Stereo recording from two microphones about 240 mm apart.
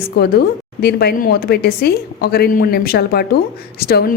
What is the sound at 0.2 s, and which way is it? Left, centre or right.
A woman's voice, left.